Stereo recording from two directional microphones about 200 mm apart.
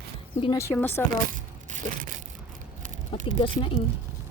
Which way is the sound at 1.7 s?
40° right (ahead or behind).